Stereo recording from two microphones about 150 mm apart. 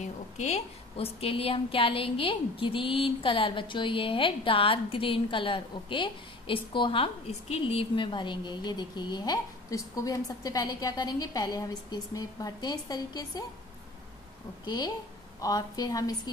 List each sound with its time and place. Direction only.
0.0 s a woman's voice: 50° left (ahead or behind); by 13.5 s 25° left (ahead or behind)
14.6 s a woman's voice: 25° left (ahead or behind)